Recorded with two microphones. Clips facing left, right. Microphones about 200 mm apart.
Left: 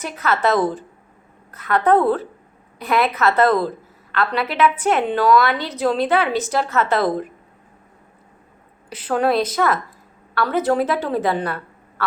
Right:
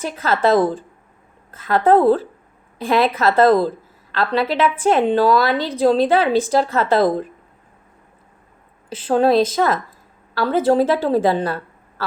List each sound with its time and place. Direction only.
0.0 s a woman's voice: 30° right (ahead or behind)
8.9 s a woman's voice: 30° right (ahead or behind)